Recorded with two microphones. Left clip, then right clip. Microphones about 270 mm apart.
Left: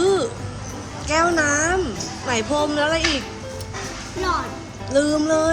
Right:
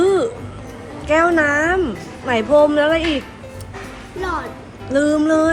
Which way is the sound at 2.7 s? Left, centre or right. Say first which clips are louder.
Right 5 dB; right.